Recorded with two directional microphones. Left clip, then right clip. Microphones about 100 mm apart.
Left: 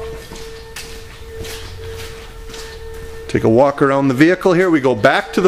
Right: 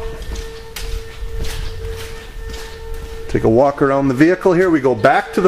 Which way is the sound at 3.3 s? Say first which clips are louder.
Left 1 dB; 15° left (ahead or behind).